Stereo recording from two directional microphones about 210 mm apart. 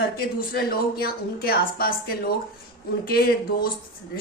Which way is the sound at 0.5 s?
45° left (ahead or behind).